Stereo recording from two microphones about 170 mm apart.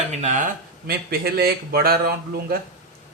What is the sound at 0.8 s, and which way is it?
Speech, 65° right (ahead or behind).